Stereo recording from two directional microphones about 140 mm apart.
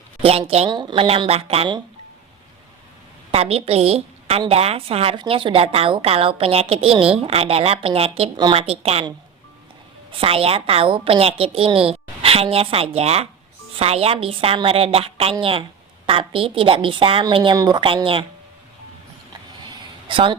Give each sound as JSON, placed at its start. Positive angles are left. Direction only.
{"t": 0.2, "sound": "a woman's voice", "side_deg": -45}
{"t": 0.7, "sound": "a woman's voice", "side_deg": -35}
{"t": 3.3, "sound": "a woman's voice", "side_deg": -45}
{"t": 10.1, "sound": "a woman's voice", "side_deg": -40}
{"t": 19.3, "sound": "a sound", "side_deg": -35}